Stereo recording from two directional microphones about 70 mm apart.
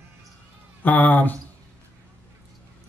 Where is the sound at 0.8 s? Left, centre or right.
Left.